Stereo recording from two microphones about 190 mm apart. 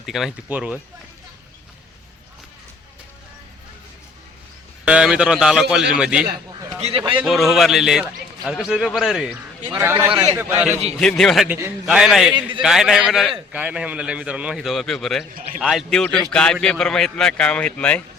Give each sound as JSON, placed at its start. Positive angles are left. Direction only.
{"t": 0.0, "sound": "a man's voice", "side_deg": 0}
{"t": 4.9, "sound": "a man's voice", "side_deg": -5}
{"t": 6.5, "sound": "a sound", "side_deg": -20}
{"t": 6.7, "sound": "a man's voice", "side_deg": -30}
{"t": 7.2, "sound": "a man's voice", "side_deg": 0}
{"t": 11.0, "sound": "a man's voice", "side_deg": 5}
{"t": 11.4, "sound": "a man's voice", "side_deg": -10}